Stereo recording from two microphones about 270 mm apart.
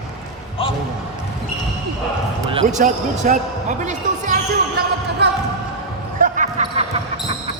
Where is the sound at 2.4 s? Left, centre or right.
Right.